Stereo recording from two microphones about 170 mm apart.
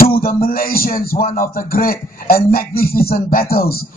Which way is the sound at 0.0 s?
60° left (ahead or behind).